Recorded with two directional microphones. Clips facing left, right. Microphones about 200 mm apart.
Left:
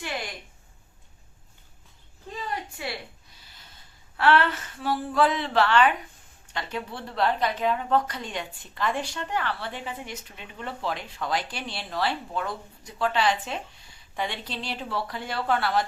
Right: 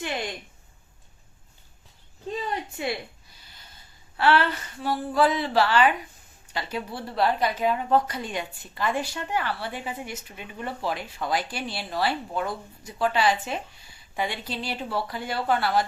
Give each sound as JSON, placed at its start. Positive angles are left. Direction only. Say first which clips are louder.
{"t": 2.8, "sound": "a sound", "louder": "right 8 dB", "side_deg": -20}
{"t": 3.4, "sound": "snort", "louder": "right 2 dB", "side_deg": 0}
{"t": 4.2, "sound": "a woman's voice", "louder": "even", "side_deg": 0}